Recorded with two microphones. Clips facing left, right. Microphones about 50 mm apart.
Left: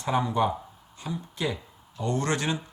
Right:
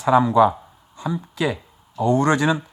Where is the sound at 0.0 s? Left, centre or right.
Right.